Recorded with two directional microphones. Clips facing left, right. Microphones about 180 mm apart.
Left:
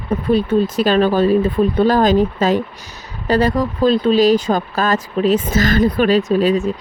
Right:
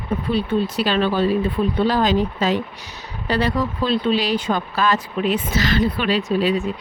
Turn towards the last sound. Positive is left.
turn(degrees=45)  # may be behind; listen again after turning